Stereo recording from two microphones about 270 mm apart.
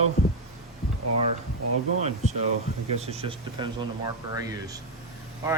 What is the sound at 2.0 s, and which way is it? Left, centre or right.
Speech, right.